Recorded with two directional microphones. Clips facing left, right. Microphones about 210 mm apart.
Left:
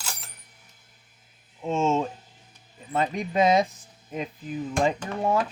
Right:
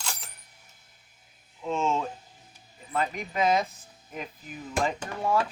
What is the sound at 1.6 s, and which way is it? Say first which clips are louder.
Speech: left 4 dB; 25° left (ahead or behind).